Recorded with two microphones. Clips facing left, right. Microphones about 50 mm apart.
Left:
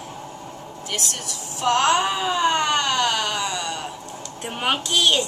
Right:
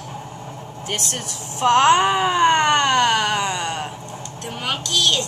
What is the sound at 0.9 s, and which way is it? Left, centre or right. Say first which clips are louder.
Baby cry: right 2 dB; right.